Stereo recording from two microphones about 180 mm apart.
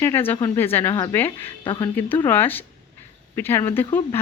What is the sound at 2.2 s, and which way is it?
Speech, 10° left (ahead or behind).